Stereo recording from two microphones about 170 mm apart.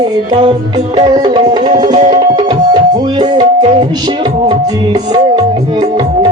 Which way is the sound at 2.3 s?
25° right (ahead or behind).